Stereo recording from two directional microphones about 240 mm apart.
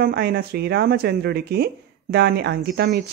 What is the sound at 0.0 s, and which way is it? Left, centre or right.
Speech, right.